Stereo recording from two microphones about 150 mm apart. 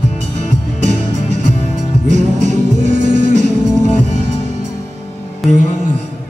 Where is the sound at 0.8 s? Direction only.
55° right (ahead or behind).